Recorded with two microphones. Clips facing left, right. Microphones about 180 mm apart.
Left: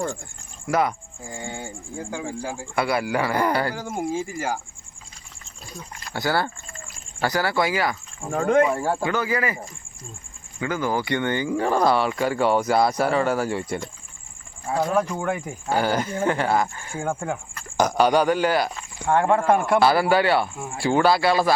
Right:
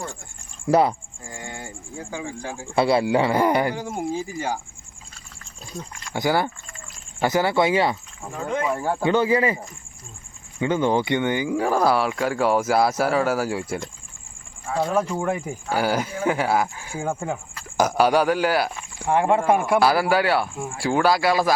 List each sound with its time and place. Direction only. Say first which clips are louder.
0.7 s speech: right 4 dB; 30° right (ahead or behind)
1.3 s speech: left 3 dB; 25° left (ahead or behind)
1.5 s speech: left 2 dB; 5° right (ahead or behind)
2.4 s speech: left 2 dB; 5° left (ahead or behind)
2.7 s speech: right 5 dB; 25° right (ahead or behind)
3.8 s speech: even; centre (ahead or behind)
6.1 s speech: right 2 dB; 15° right (ahead or behind)
8.4 s speech: left 8 dB; 65° left (ahead or behind)
9.0 s speech: right 5 dB; 30° right (ahead or behind)
10.6 s speech: right 4 dB; 25° right (ahead or behind); by 21.5 s 10° right (ahead or behind)